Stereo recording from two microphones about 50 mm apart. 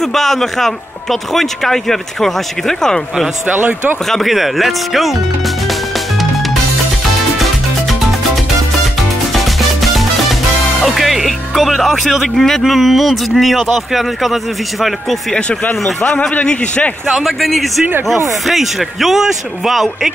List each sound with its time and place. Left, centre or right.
0.0 s speech: centre
3.4 s speech: right
4.1 s speech: centre
5.7 s music: centre
9.3 s music: centre
12.4 s speech: centre
16.2 s a man's voice: left
17.1 s speech: centre